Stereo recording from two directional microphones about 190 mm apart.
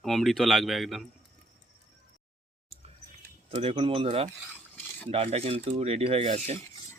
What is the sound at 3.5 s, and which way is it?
Speech, 30° right (ahead or behind).